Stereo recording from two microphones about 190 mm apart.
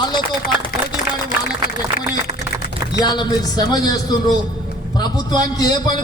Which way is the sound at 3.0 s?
20° left (ahead or behind).